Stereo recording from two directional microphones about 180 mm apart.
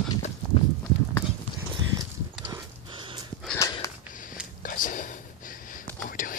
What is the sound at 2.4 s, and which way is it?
Livestock, 25° right (ahead or behind).